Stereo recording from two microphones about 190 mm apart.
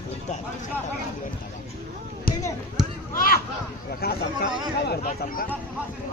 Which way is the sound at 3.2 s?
50° left (ahead or behind).